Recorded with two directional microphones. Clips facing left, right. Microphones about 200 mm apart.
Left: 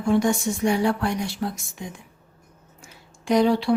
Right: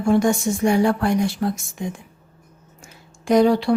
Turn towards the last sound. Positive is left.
turn(degrees=-45)  # may be behind; listen again after turning